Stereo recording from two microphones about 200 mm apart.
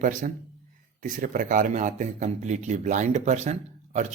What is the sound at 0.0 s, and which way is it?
Speech, 40° right (ahead or behind).